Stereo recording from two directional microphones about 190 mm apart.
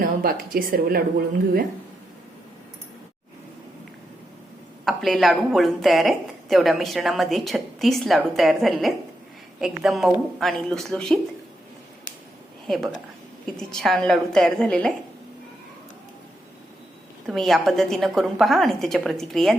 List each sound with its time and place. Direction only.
0.0 s a woman's voice: 50° right (ahead or behind)
4.9 s speech: centre (ahead or behind)
12.6 s a woman's voice: centre (ahead or behind)
17.2 s speech: centre (ahead or behind)